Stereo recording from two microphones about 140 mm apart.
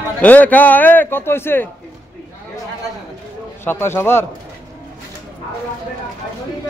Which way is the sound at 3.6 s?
15° left (ahead or behind).